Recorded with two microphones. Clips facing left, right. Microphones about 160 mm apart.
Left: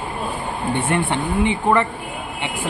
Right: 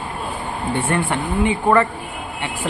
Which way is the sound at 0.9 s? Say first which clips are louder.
Left 1 dB; 20° left (ahead or behind).